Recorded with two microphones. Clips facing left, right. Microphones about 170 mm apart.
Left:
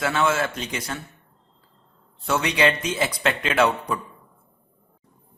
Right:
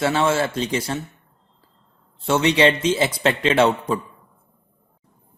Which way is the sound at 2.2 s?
25° right (ahead or behind).